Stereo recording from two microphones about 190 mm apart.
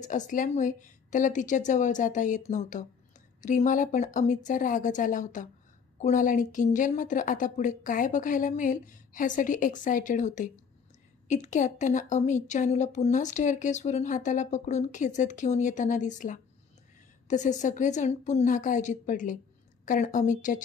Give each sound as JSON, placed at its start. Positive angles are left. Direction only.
{"t": 0.0, "sound": "a woman's voice", "side_deg": 40}